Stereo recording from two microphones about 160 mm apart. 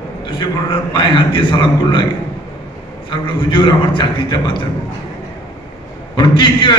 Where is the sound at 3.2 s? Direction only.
30° left (ahead or behind).